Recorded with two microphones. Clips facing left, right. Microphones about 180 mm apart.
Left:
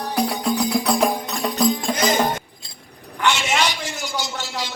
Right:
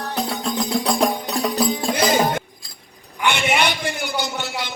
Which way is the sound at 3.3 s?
60° right (ahead or behind).